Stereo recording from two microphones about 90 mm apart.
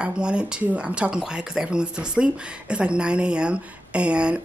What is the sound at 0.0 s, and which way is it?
Speech, 10° right (ahead or behind).